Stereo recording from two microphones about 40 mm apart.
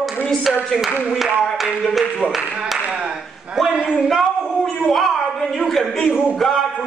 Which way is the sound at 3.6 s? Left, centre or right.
Centre.